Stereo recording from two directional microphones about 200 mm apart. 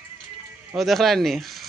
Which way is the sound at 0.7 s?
Centre (ahead or behind).